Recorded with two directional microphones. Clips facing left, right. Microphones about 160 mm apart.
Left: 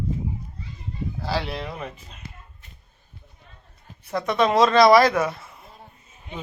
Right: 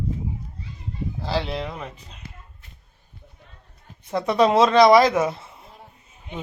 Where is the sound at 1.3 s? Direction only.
20° right (ahead or behind).